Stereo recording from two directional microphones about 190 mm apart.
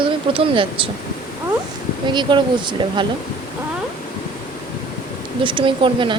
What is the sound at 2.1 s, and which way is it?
A woman's voice, 25° right (ahead or behind).